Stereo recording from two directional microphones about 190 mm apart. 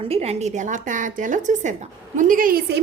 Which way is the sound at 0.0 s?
35° right (ahead or behind).